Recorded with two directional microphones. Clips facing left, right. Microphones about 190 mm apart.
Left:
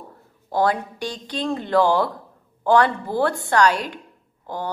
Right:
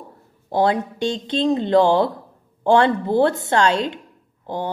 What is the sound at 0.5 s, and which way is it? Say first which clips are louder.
Speech: right 2 dB; 25° right (ahead or behind).